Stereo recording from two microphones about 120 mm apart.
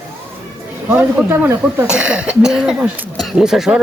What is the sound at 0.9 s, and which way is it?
Speech, 20° right (ahead or behind).